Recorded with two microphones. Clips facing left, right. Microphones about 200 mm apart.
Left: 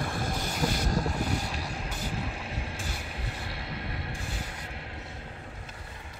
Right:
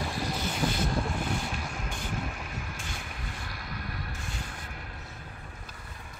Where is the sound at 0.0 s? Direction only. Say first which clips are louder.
Even; 50° left (ahead or behind).